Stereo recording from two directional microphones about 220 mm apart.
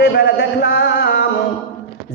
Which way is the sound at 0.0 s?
45° left (ahead or behind).